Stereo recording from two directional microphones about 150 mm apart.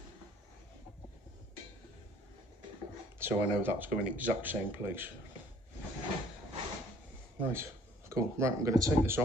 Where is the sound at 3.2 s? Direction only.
15° right (ahead or behind).